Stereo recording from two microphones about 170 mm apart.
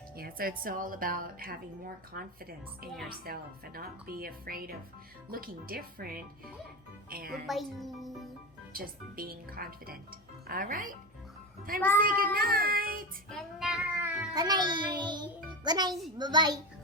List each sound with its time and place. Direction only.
0.2 s speech: 60° right (ahead or behind)
7.4 s a woman's voice: centre (ahead or behind)
8.7 s speech: 60° right (ahead or behind)
11.9 s speech: 55° right (ahead or behind)
13.3 s child singing: centre (ahead or behind)
14.3 s a child's voice: 25° right (ahead or behind)